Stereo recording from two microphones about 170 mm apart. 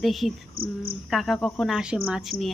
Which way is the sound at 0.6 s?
60° right (ahead or behind).